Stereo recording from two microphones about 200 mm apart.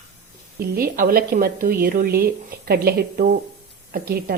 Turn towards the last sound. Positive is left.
turn(degrees=-50)  # may be behind; listen again after turning